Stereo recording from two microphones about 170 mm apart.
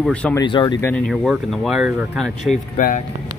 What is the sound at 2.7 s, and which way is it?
Speech, 50° left (ahead or behind).